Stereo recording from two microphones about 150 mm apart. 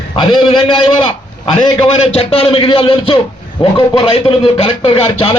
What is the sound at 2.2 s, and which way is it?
A man's voice, 40° left (ahead or behind).